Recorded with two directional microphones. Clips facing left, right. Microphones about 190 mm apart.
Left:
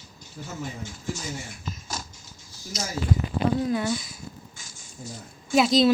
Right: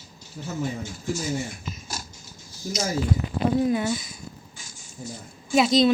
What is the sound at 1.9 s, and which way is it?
Mechanisms, 10° right (ahead or behind).